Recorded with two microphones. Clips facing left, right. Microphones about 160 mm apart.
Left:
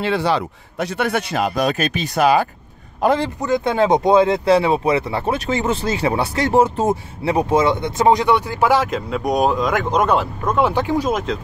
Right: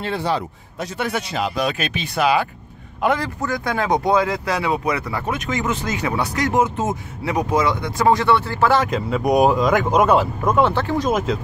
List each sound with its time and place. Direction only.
0.0 s a man's voice: 80° left; by 2.4 s 45° left (ahead or behind)
3.0 s a man's voice: 30° left (ahead or behind); by 8.8 s 15° left (ahead or behind)
8.8 s speech: centre (ahead or behind)
10.6 s speech: 15° left (ahead or behind)
11.1 s speech: 5° right (ahead or behind)